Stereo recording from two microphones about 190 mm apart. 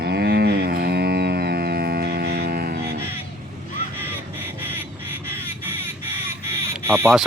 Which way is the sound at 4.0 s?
10° right (ahead or behind).